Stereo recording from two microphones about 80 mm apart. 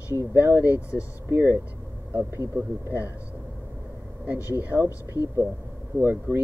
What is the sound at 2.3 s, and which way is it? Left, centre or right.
Speech, right.